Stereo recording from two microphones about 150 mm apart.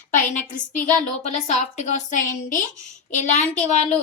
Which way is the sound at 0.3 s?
60° left (ahead or behind).